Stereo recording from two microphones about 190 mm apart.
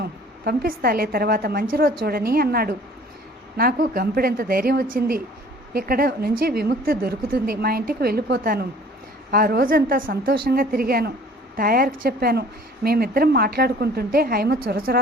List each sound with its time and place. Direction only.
0.0 s a woman's voice: 55° right (ahead or behind)